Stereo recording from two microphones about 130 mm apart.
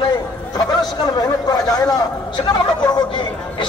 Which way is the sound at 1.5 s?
30° left (ahead or behind).